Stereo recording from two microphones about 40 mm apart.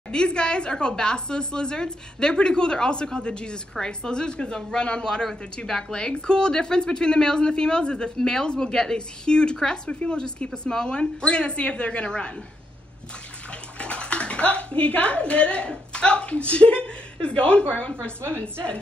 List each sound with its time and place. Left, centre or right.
0.1 s speech: left
13.5 s speech: left